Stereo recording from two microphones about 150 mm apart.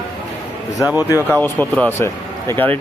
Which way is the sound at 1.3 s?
10° left (ahead or behind).